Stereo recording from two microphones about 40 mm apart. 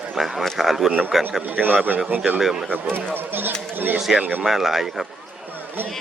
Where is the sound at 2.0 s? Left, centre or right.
Right.